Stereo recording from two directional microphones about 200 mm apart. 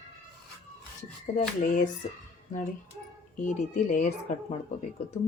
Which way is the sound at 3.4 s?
35° left (ahead or behind).